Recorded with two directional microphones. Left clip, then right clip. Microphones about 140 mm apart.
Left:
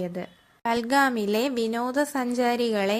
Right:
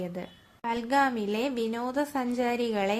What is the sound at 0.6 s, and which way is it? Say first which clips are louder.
A woman's voice: left 4 dB; 40° left (ahead or behind).